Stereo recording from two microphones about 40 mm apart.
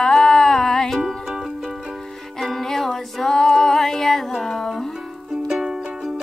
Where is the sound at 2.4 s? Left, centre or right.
Centre.